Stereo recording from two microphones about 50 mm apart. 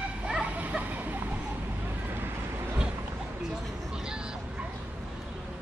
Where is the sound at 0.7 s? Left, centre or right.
Right.